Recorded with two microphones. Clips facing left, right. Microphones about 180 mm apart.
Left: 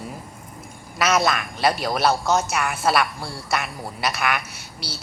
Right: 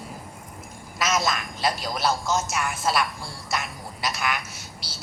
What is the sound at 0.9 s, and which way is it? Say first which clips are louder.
A woman's voice: left 5 dB; 60° left (ahead or behind).